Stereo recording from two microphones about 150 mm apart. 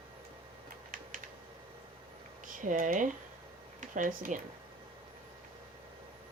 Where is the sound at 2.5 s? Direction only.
60° right (ahead or behind).